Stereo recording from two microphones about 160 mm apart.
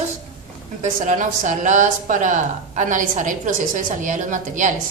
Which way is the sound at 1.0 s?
50° right (ahead or behind).